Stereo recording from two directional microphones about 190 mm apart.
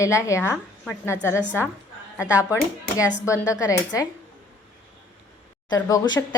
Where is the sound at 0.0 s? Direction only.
15° left (ahead or behind).